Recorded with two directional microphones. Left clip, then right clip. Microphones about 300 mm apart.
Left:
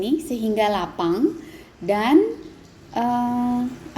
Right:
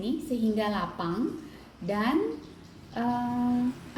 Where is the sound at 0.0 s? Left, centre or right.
Left.